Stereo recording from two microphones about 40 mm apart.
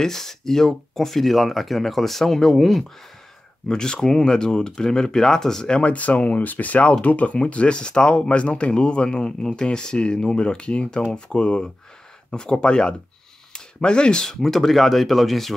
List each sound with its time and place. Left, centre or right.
0.0 s speech: centre
3.6 s speech: centre
5.7 s speech: left
14.2 s speech: centre